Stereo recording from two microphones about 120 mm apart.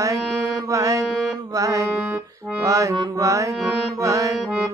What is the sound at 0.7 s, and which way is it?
Music, 30° right (ahead or behind).